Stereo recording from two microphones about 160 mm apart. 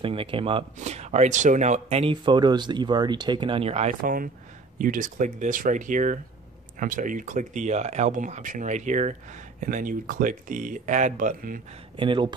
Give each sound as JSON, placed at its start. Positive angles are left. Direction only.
{"t": 0.0, "sound": "speech", "side_deg": -35}
{"t": 0.7, "sound": "speech", "side_deg": -45}
{"t": 4.0, "sound": "speech", "side_deg": -60}
{"t": 12.0, "sound": "speech", "side_deg": -30}